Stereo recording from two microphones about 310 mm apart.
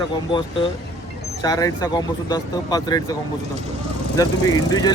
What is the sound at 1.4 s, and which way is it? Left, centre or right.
Speech, centre.